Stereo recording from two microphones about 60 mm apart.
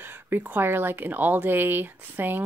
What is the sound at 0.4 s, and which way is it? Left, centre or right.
Speech, right.